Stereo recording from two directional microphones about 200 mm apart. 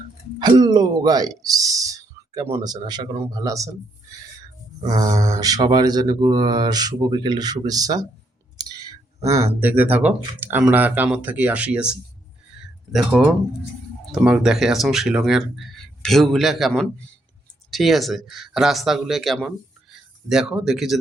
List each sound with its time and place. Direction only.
0.3 s speech: 20° right (ahead or behind)
4.8 s mantra: 20° right (ahead or behind)
8.5 s speech: 20° right (ahead or behind); by 21.0 s centre (ahead or behind)